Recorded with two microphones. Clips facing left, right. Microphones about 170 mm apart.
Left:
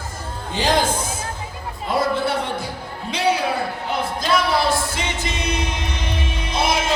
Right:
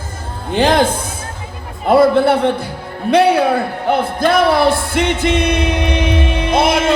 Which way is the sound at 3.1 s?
60° right (ahead or behind).